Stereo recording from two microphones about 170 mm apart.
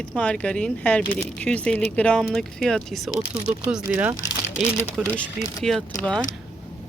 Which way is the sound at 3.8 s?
15° right (ahead or behind).